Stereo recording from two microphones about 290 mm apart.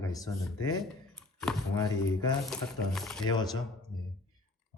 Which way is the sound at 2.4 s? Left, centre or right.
Centre.